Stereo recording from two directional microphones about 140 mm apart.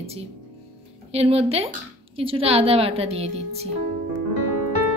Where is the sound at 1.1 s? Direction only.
45° right (ahead or behind).